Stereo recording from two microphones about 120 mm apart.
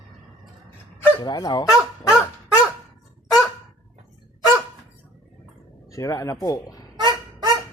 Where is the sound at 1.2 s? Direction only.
35° left (ahead or behind).